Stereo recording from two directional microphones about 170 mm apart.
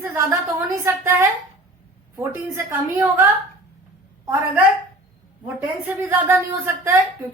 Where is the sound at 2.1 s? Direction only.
15° right (ahead or behind).